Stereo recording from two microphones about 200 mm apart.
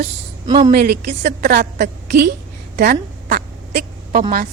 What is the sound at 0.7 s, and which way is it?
A woman's voice, 50° right (ahead or behind).